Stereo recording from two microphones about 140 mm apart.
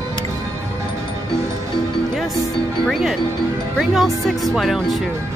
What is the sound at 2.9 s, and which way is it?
Music, centre (ahead or behind).